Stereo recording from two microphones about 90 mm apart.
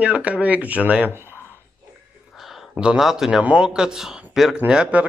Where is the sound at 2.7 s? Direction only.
10° right (ahead or behind).